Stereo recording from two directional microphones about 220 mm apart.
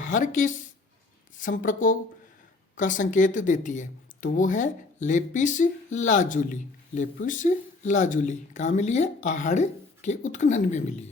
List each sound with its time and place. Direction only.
0.0 s speech: 35° left (ahead or behind)